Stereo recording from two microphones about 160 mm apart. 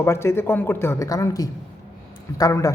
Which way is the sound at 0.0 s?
15° left (ahead or behind).